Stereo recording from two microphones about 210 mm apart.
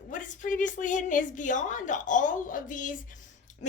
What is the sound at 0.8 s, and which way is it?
A woman's voice, 35° left (ahead or behind).